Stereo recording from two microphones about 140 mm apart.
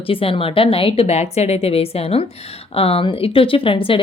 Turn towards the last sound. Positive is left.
turn(degrees=40)  # may be behind; listen again after turning